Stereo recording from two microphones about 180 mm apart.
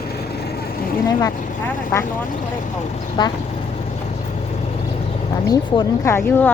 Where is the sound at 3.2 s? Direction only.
25° left (ahead or behind).